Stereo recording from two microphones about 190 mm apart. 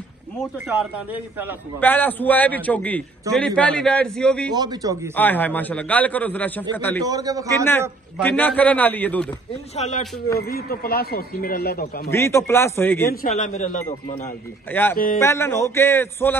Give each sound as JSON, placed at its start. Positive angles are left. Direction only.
{"t": 0.7, "sound": "speech", "side_deg": -10}
{"t": 1.8, "sound": "a man's voice", "side_deg": 10}
{"t": 4.6, "sound": "a man's voice", "side_deg": -20}
{"t": 5.1, "sound": "a man's voice", "side_deg": 10}
{"t": 7.1, "sound": "a man's voice", "side_deg": -20}
{"t": 8.2, "sound": "a man's voice", "side_deg": 10}
{"t": 9.8, "sound": "a man's voice", "side_deg": 40}
{"t": 10.4, "sound": "speech", "side_deg": 50}
{"t": 12.1, "sound": "a man's voice", "side_deg": 15}
{"t": 13.0, "sound": "speech", "side_deg": 50}
{"t": 14.7, "sound": "a man's voice", "side_deg": 10}